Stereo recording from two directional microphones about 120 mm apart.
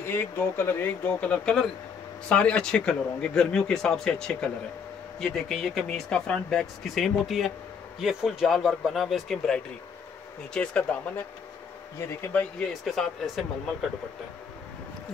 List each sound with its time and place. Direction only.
0.0 s speech: 20° left (ahead or behind)
12.8 s speech: centre (ahead or behind)